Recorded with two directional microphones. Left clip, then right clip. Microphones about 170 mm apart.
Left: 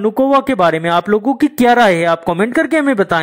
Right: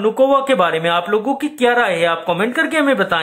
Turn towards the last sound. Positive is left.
turn(degrees=45)  # may be behind; listen again after turning